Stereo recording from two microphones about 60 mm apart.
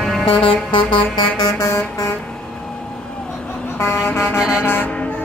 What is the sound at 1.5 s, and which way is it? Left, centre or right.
Vehicle, left.